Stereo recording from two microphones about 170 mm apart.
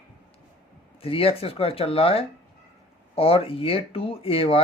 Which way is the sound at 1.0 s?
35° left (ahead or behind).